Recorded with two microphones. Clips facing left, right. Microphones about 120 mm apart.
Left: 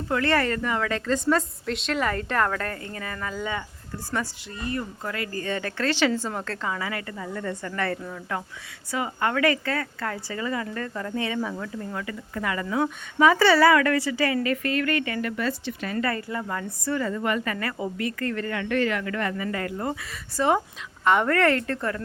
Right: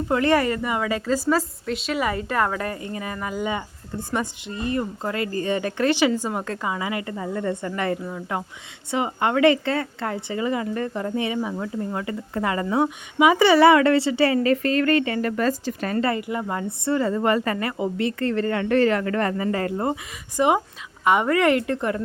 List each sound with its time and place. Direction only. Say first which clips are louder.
0.1 s a woman's voice: right 3 dB; 15° right (ahead or behind)
12.8 s a woman's voice: right 1 dB; 15° right (ahead or behind)
15.3 s speech: right 5 dB; 40° right (ahead or behind)
16.0 s a woman's voice: right 3 dB; 20° right (ahead or behind)
20.3 s a woman's voice: right 3 dB; 15° right (ahead or behind)